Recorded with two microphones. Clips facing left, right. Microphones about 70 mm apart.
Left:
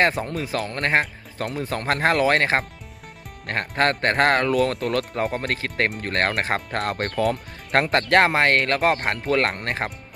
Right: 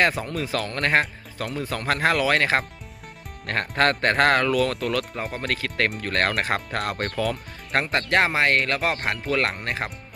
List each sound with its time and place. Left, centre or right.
0.0 s speech: left
5.4 s speech: left